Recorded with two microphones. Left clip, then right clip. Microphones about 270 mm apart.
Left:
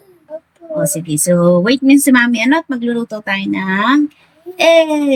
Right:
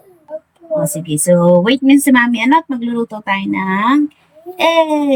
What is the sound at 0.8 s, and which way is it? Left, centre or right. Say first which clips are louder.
A woman's voice: left 3 dB; centre.